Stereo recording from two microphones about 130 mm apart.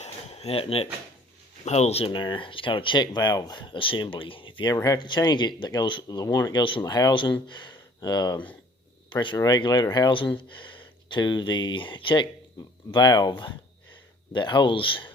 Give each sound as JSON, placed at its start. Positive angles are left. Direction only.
{"t": 0.0, "sound": "a sound", "side_deg": 50}
{"t": 1.6, "sound": "speech", "side_deg": 55}
{"t": 4.7, "sound": "speech", "side_deg": 25}